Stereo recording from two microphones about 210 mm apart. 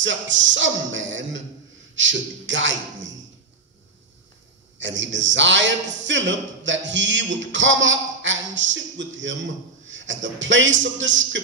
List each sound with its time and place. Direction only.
0.0 s a man's voice: 60° right (ahead or behind)
4.7 s a man's voice: 60° right (ahead or behind)